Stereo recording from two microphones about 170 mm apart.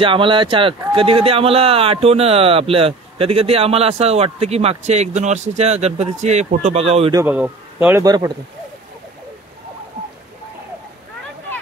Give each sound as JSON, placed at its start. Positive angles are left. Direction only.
{"t": 0.0, "sound": "speech", "side_deg": -30}
{"t": 7.2, "sound": "a man's voice", "side_deg": -10}
{"t": 8.0, "sound": "speech", "side_deg": -20}